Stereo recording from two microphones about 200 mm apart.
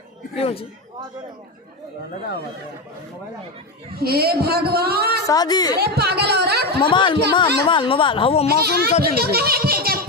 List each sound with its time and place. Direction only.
0.3 s speech: 30° left (ahead or behind)
3.9 s speech: 50° right (ahead or behind)
5.2 s speech: 20° left (ahead or behind)
5.8 s speech: 55° right (ahead or behind)
6.7 s speech: 25° left (ahead or behind)
8.5 s speech: 50° right (ahead or behind)